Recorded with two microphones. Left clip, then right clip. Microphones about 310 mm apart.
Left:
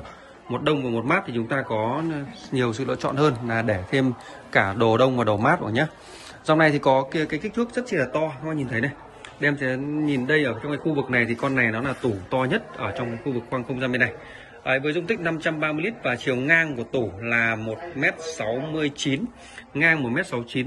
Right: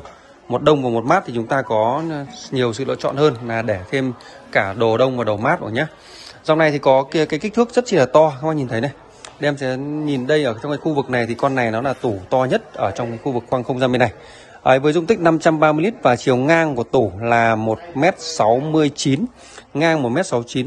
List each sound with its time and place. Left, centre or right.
0.5 s a man's voice: centre